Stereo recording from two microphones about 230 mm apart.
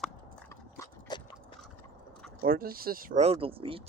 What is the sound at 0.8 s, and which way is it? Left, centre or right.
Dog, centre.